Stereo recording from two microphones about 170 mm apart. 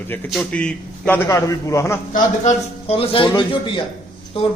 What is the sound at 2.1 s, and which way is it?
A man's voice, 45° left (ahead or behind).